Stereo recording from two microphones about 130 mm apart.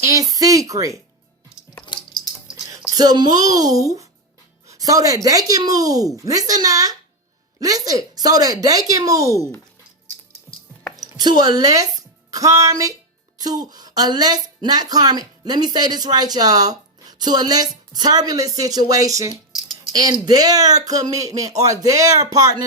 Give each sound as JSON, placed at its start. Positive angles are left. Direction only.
{"t": 0.0, "sound": "speech", "side_deg": -25}
{"t": 2.9, "sound": "speech", "side_deg": -30}
{"t": 11.2, "sound": "a woman's voice", "side_deg": -30}